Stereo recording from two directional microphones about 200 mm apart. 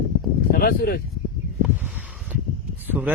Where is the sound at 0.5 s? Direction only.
50° left (ahead or behind).